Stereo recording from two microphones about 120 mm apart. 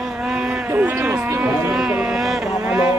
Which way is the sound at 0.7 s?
20° right (ahead or behind).